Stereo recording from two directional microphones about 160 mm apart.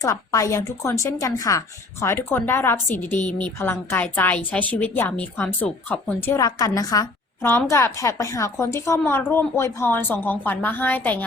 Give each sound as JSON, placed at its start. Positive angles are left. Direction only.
{"t": 0.0, "sound": "a woman's voice", "side_deg": 20}
{"t": 6.3, "sound": "a woman's voice", "side_deg": 20}